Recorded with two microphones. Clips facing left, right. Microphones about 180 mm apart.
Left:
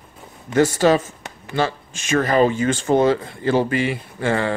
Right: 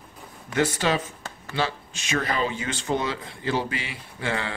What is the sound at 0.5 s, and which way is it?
Speech, 40° left (ahead or behind).